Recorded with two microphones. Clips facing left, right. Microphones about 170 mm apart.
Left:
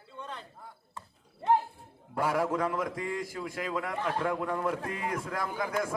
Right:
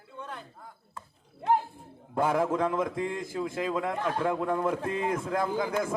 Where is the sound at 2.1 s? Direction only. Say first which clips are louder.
Right 3 dB; 25° right (ahead or behind).